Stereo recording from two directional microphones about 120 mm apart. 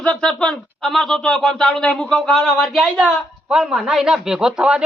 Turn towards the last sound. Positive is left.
turn(degrees=-5)  # may be behind; listen again after turning